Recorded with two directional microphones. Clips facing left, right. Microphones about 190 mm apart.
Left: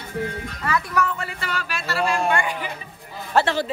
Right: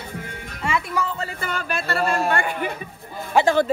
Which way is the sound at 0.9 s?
30° right (ahead or behind).